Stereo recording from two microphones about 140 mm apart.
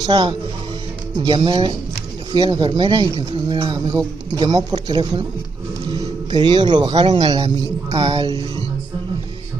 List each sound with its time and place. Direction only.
0.0 s speech: 35° right (ahead or behind)
7.5 s music: 25° right (ahead or behind)
8.0 s speech: 45° right (ahead or behind)